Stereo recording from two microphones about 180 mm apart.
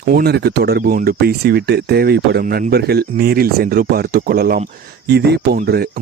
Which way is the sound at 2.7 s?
60° right (ahead or behind).